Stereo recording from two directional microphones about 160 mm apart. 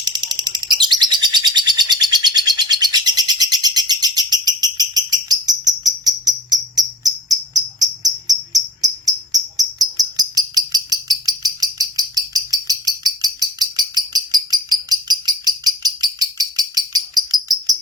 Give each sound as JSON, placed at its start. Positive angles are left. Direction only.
{"t": 0.0, "sound": "bird", "side_deg": -25}
{"t": 7.5, "sound": "cricket", "side_deg": -25}
{"t": 13.2, "sound": "a sound", "side_deg": -25}